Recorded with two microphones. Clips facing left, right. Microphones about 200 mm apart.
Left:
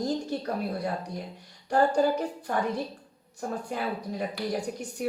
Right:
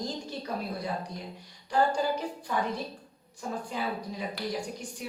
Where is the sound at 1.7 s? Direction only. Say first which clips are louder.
Left 4 dB; 45° left (ahead or behind).